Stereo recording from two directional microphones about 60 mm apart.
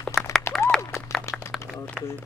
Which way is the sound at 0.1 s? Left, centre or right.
Left.